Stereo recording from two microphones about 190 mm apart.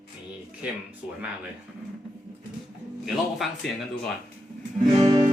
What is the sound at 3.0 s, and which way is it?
Speech, centre (ahead or behind).